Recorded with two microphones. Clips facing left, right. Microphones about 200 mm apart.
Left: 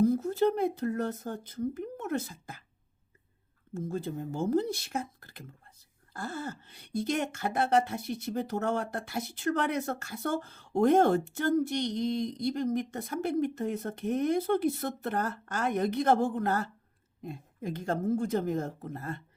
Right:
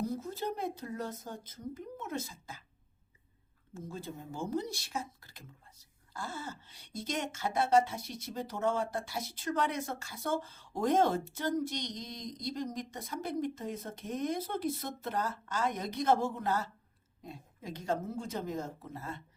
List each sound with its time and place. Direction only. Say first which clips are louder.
0.0 s speech: left 11 dB; 55° left (ahead or behind)
3.8 s speech: left 8 dB; 55° left (ahead or behind)